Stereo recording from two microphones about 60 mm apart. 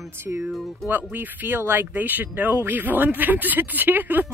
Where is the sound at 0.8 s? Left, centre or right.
Right.